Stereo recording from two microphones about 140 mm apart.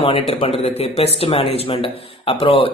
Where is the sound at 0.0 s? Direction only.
45° left (ahead or behind).